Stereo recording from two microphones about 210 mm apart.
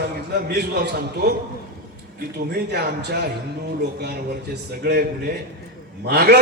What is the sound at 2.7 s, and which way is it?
Speech, 50° right (ahead or behind).